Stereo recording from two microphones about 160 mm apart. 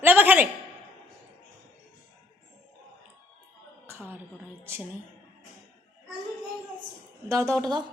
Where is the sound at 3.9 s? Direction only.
10° right (ahead or behind).